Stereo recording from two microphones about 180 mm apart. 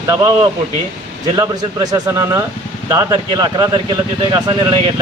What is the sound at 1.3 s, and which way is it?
Speech, 25° right (ahead or behind).